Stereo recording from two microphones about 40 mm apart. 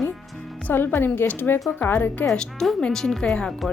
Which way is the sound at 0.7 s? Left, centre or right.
Left.